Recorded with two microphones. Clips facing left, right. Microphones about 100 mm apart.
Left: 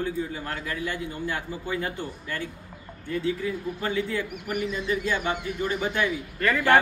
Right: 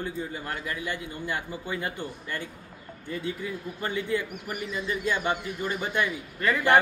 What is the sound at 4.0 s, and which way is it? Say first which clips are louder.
Speech: right 2 dB; 15° right (ahead or behind).